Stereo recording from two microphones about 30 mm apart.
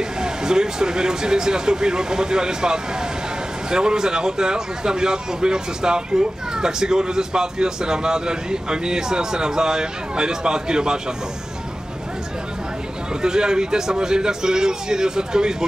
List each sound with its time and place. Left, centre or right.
0.2 s a man's voice: right
13.2 s a man's voice: right